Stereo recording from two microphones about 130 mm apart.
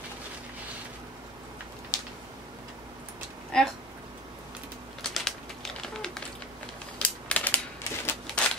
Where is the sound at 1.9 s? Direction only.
25° left (ahead or behind).